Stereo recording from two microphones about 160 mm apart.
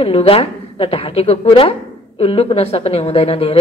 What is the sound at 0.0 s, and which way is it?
A woman's voice, 35° left (ahead or behind).